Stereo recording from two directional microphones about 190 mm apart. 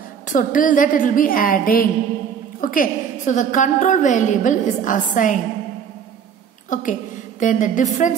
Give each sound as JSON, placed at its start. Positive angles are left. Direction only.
{"t": 0.3, "sound": "a woman's voice", "side_deg": 45}
{"t": 6.7, "sound": "a woman's voice", "side_deg": 45}